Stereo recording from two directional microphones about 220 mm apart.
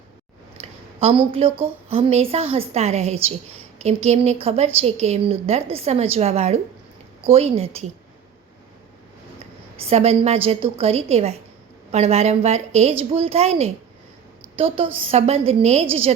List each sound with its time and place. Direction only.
0.6 s a sound: 30° right (ahead or behind)
1.9 s a woman's voice: 30° right (ahead or behind)
9.4 s a woman's voice: 25° right (ahead or behind)